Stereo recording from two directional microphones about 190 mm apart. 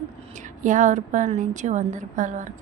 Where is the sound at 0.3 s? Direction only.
40° right (ahead or behind).